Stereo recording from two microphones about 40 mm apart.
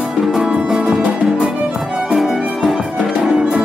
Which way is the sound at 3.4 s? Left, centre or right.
Right.